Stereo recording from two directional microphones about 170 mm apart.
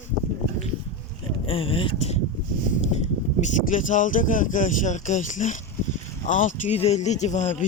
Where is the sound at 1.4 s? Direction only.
30° left (ahead or behind).